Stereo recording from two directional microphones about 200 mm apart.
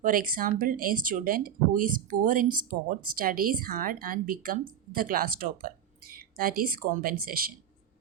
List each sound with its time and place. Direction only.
0.0 s speech: 45° right (ahead or behind)